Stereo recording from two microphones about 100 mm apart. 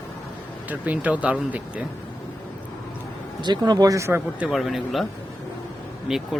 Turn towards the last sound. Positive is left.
turn(degrees=-5)  # may be behind; listen again after turning